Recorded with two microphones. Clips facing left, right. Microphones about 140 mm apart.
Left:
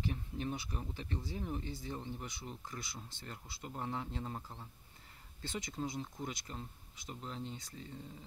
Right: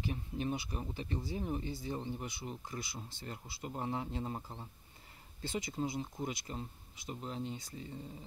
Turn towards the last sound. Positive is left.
turn(degrees=-15)  # may be behind; listen again after turning